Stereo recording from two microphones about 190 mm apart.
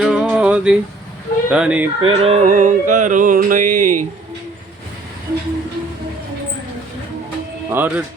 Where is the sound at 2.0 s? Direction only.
30° right (ahead or behind).